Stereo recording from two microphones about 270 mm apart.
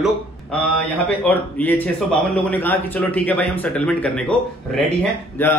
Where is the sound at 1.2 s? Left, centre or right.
Centre.